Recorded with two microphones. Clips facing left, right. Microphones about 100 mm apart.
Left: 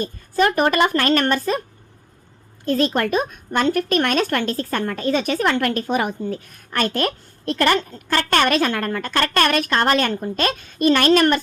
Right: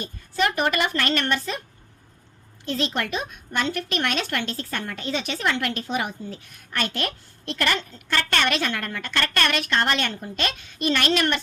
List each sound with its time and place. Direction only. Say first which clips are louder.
0.0 s speech: left 6 dB; 40° left (ahead or behind)
2.6 s speech: left 7 dB; 45° left (ahead or behind)